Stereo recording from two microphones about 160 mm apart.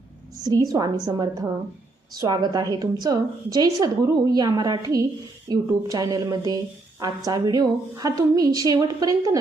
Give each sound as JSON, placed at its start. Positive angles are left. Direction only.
{"t": 0.4, "sound": "a woman's voice", "side_deg": -25}